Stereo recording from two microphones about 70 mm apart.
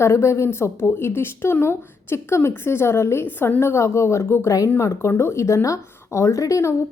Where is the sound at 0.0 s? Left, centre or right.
Left.